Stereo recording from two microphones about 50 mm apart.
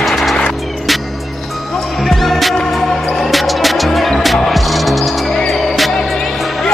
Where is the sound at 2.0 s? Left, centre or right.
Centre.